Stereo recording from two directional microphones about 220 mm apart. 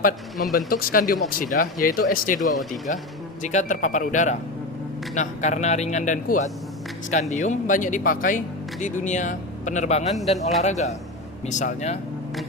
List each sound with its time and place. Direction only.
0.5 s a man's voice: 40° left (ahead or behind)